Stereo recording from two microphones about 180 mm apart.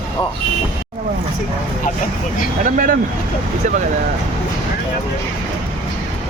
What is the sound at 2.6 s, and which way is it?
Speech, 50° right (ahead or behind).